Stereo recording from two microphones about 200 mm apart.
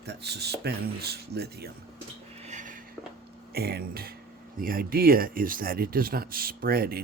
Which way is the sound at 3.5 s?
50° right (ahead or behind).